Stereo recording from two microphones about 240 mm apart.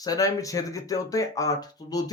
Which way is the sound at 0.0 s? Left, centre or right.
Centre.